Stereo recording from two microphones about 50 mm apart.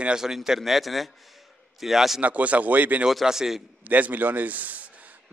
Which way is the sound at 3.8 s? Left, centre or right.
Right.